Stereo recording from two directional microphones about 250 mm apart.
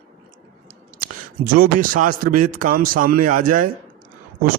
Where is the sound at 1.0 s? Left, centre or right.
Right.